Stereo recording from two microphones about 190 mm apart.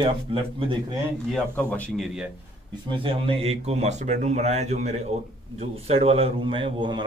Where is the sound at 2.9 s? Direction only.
30° right (ahead or behind).